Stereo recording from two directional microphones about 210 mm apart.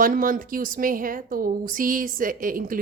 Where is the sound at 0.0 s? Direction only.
40° right (ahead or behind).